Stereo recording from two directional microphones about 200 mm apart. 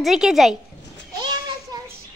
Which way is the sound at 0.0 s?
Centre (ahead or behind).